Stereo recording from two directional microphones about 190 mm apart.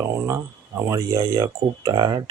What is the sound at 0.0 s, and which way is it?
Speech, 15° right (ahead or behind).